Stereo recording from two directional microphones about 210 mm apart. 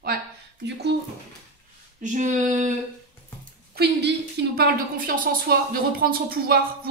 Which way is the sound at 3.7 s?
50° right (ahead or behind).